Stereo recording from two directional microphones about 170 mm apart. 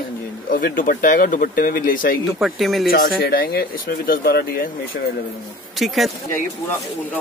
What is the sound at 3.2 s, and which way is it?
Speech, 65° left (ahead or behind).